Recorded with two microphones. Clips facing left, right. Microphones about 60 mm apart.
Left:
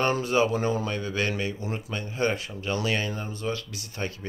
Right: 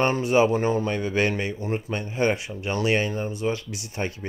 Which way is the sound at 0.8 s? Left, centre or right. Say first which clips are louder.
Right 5 dB; right.